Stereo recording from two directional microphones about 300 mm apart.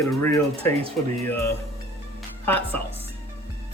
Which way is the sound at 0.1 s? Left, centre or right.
Centre.